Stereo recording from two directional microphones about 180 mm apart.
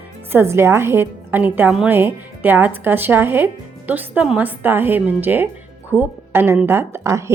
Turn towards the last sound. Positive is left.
turn(degrees=-15)  # may be behind; listen again after turning